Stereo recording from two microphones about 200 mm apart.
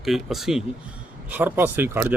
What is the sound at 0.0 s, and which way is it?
Speech, centre (ahead or behind).